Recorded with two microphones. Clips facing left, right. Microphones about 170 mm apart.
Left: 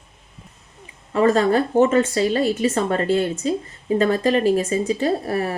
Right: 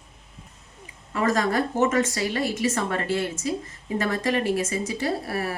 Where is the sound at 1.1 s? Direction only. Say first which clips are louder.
Left 6 dB; 30° left (ahead or behind).